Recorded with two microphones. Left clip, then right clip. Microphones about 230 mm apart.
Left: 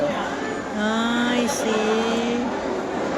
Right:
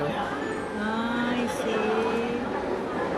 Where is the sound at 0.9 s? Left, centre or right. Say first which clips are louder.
Left 6 dB; centre.